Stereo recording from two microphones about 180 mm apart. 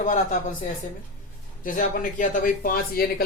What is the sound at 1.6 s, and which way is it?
A woman's voice, 50° left (ahead or behind).